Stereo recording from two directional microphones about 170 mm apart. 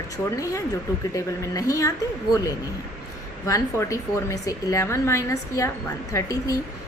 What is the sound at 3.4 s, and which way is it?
A woman's voice, 20° left (ahead or behind).